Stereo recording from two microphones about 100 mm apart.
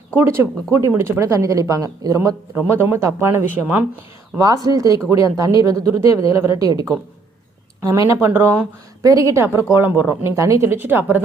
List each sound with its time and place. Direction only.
0.2 s speech: 25° right (ahead or behind)
4.4 s speech: 35° right (ahead or behind); by 11.2 s 20° right (ahead or behind)